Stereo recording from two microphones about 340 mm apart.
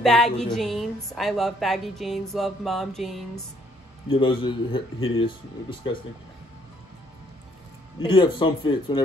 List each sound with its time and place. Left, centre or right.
0.0 s a woman's voice: centre
4.1 s a man's voice: centre
8.0 s a man's voice: centre